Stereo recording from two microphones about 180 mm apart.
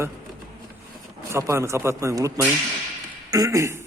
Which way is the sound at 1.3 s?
15° right (ahead or behind).